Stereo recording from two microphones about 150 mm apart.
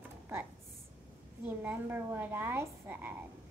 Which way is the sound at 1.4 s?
15° right (ahead or behind).